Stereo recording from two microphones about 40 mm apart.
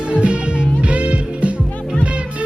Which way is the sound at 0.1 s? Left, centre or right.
Right.